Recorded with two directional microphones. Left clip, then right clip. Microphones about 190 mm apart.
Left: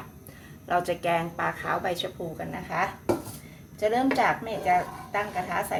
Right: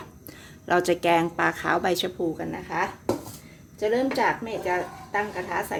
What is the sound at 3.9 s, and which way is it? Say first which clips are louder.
Speech: right 1 dB; 35° right (ahead or behind).